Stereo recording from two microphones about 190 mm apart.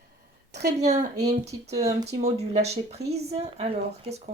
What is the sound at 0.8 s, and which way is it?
Speech, 35° right (ahead or behind).